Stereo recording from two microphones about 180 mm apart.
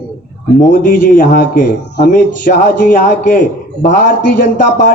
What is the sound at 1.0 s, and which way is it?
A man's voice, 50° left (ahead or behind).